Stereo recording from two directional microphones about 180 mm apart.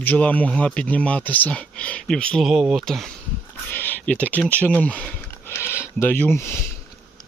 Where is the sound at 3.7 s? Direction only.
10° left (ahead or behind).